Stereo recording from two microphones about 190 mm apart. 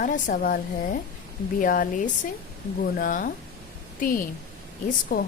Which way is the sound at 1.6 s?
45° left (ahead or behind).